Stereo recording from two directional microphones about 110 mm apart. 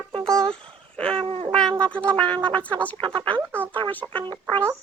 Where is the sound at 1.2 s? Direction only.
55° right (ahead or behind).